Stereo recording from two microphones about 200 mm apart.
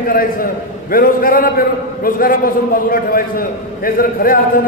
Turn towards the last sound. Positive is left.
turn(degrees=45)  # may be behind; listen again after turning